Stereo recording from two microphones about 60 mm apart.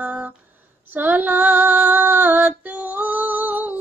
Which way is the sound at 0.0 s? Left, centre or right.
Right.